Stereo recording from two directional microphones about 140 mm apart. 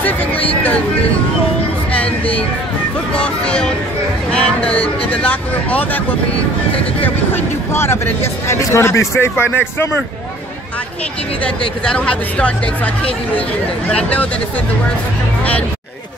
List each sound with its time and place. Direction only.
0.0 s a sound: 10° left (ahead or behind)
1.9 s music: 10° left (ahead or behind)
3.2 s speech: 5° left (ahead or behind)
7.0 s speech: 15° left (ahead or behind)
11.8 s speech: 5° left (ahead or behind)